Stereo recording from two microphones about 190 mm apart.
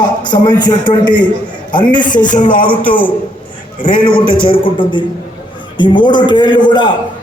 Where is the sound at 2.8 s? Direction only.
10° left (ahead or behind).